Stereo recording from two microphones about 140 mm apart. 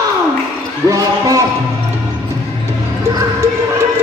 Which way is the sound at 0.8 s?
25° right (ahead or behind).